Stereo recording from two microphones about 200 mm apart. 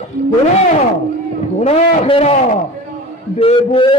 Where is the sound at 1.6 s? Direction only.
30° left (ahead or behind).